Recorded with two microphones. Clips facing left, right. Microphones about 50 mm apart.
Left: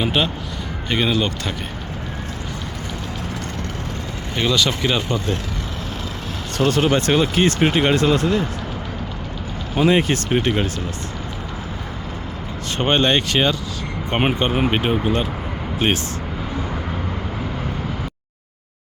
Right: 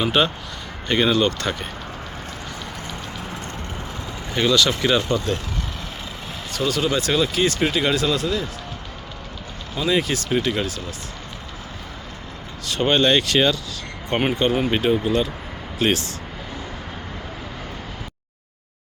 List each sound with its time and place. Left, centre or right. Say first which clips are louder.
0.0 s speech: right 1 dB; centre
4.4 s speech: right 1 dB; centre
6.6 s speech: left 5 dB; left
6.9 s speech: left 3 dB; left
9.8 s speech: left 4 dB; left
12.6 s speech: even; left